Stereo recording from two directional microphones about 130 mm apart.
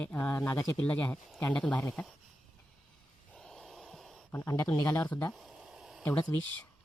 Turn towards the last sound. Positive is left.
turn(degrees=15)  # may be behind; listen again after turning